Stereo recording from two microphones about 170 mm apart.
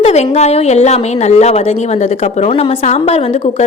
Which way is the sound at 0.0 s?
40° left (ahead or behind).